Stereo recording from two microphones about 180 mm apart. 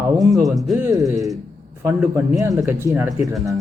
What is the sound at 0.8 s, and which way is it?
Speech, 20° right (ahead or behind).